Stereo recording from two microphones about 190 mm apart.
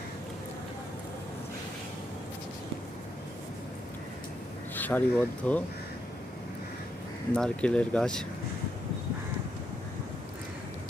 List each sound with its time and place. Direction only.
4.7 s speech: 10° left (ahead or behind)
7.3 s speech: 5° left (ahead or behind)